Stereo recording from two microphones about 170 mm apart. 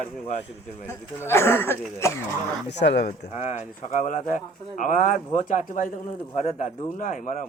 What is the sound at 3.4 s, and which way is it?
Speech, 45° left (ahead or behind).